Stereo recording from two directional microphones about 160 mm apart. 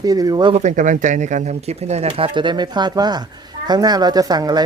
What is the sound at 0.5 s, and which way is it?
Speech, 50° right (ahead or behind).